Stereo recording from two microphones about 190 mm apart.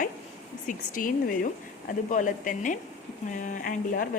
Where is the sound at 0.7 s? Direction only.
45° left (ahead or behind).